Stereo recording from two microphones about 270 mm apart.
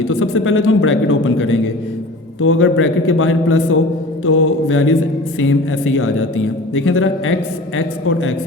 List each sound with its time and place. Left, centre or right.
0.1 s speech: left